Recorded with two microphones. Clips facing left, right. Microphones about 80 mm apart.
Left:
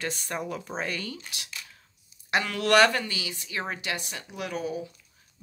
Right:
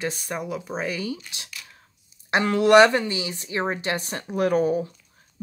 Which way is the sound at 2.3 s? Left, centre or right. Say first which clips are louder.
Right 7 dB; right.